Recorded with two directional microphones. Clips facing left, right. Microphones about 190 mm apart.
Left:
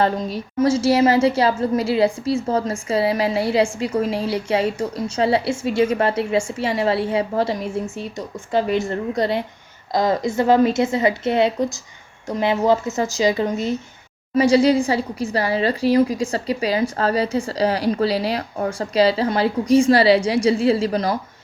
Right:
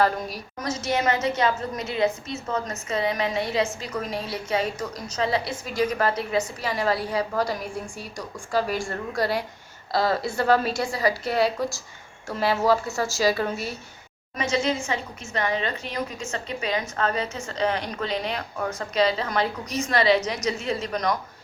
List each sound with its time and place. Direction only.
0.0 s a woman's voice: 25° left (ahead or behind)
14.3 s a woman's voice: 35° left (ahead or behind)